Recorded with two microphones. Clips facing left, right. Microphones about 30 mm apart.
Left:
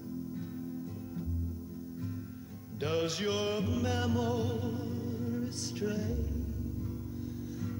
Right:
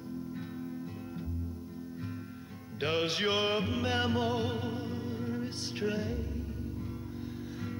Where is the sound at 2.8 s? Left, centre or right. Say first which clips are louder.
Right 2 dB; right.